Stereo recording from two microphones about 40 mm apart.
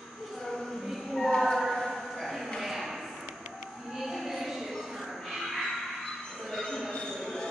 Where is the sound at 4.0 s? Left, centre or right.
Centre.